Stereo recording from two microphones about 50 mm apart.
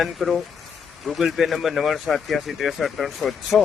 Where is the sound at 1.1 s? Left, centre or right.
Centre.